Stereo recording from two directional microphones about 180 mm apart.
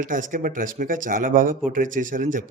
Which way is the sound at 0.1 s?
50° right (ahead or behind).